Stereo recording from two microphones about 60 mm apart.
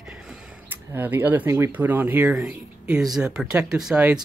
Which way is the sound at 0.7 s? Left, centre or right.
Right.